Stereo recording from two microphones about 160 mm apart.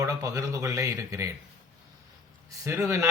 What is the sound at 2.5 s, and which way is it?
Speech, 20° right (ahead or behind).